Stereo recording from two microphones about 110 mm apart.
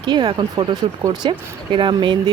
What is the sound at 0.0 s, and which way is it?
Speech, 45° right (ahead or behind).